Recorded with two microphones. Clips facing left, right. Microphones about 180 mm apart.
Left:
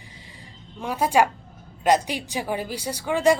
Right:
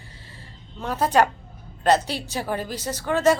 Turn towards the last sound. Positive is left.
turn(degrees=15)  # may be behind; listen again after turning